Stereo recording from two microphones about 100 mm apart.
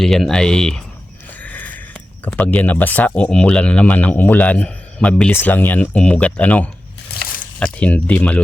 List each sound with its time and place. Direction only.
0.0 s speech: 5° left (ahead or behind)
1.4 s a sound: 15° left (ahead or behind)
3.2 s a man's voice: 10° left (ahead or behind)
5.3 s a man's voice: 20° left (ahead or behind)